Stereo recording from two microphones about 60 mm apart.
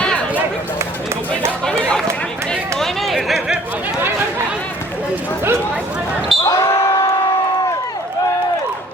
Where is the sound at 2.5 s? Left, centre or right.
Centre.